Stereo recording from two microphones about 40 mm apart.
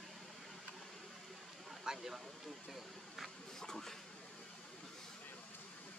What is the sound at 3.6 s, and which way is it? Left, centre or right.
Speech, centre.